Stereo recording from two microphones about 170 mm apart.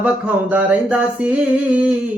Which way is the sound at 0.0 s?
10° right (ahead or behind).